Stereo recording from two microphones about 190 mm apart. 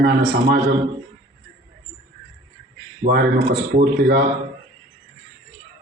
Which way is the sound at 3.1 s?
50° right (ahead or behind).